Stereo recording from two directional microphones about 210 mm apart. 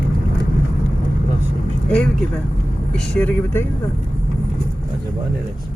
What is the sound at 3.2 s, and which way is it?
Speech, 5° left (ahead or behind).